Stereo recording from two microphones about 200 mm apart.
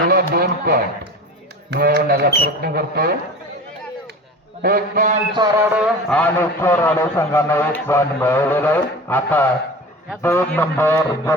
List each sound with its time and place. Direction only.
0.1 s a man's voice: 50° right (ahead or behind)
4.6 s a man's voice: 45° right (ahead or behind)
5.3 s a sound: 20° right (ahead or behind)
5.6 s a man's voice: 5° right (ahead or behind)
6.1 s a man's voice: 5° left (ahead or behind)